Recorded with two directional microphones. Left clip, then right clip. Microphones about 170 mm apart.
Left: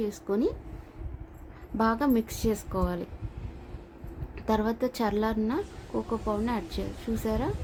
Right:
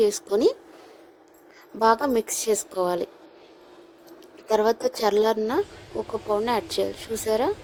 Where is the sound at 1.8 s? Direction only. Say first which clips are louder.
Right 7 dB; 35° right (ahead or behind).